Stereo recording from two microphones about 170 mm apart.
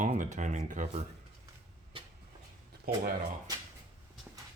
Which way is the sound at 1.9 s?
30° right (ahead or behind).